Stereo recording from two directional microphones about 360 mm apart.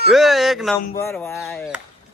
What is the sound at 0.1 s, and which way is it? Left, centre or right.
Speech, centre.